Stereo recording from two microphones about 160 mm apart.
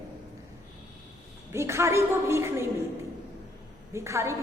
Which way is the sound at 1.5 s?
15° right (ahead or behind).